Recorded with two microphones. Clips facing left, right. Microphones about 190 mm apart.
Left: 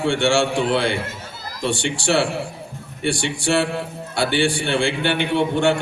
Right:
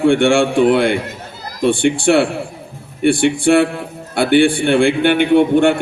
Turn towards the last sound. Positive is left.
turn(degrees=-55)  # may be behind; listen again after turning